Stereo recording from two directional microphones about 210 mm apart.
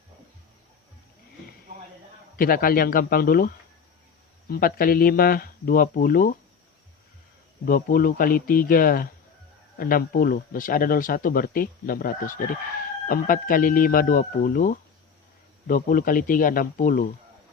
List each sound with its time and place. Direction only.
2.3 s speech: 45° left (ahead or behind)
7.6 s speech: 45° left (ahead or behind)